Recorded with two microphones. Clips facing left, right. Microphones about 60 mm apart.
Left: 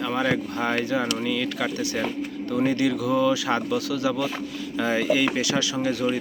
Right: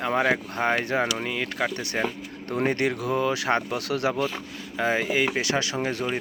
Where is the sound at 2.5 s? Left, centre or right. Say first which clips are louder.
Left 2 dB; right.